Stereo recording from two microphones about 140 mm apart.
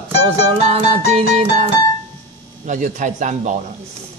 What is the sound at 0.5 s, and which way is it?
A man's voice, 45° right (ahead or behind).